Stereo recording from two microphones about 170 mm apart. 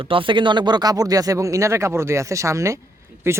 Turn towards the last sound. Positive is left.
turn(degrees=-15)  # may be behind; listen again after turning